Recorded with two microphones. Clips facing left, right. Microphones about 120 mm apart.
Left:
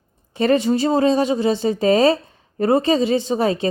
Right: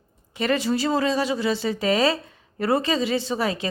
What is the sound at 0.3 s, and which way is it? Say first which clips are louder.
A woman's voice: left 6 dB; 25° left (ahead or behind).